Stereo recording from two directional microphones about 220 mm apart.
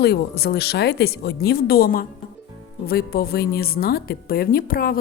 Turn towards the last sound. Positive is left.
turn(degrees=40)  # may be behind; listen again after turning